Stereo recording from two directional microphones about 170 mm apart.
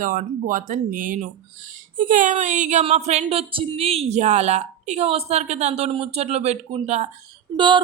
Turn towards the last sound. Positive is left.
turn(degrees=-25)  # may be behind; listen again after turning